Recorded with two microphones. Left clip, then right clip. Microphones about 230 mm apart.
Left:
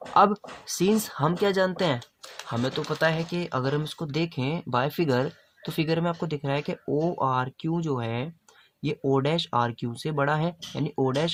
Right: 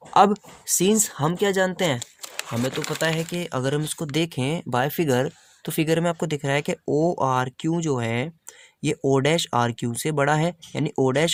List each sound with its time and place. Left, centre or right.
0.8 s speech: right